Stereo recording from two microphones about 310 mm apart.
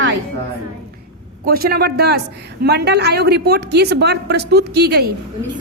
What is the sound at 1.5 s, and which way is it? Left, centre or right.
A woman's voice, right.